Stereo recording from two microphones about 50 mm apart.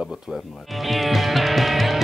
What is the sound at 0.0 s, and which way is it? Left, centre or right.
Music, centre.